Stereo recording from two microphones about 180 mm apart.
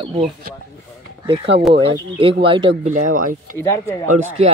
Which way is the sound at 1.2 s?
30° right (ahead or behind).